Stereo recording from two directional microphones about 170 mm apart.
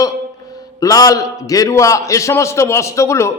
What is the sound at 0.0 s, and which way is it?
A man's voice, 20° left (ahead or behind).